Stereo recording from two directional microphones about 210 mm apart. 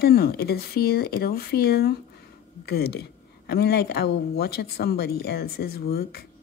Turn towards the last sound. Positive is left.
turn(degrees=50)  # may be behind; listen again after turning